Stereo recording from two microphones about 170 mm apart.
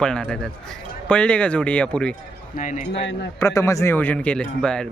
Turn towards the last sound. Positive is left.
turn(degrees=5)  # may be behind; listen again after turning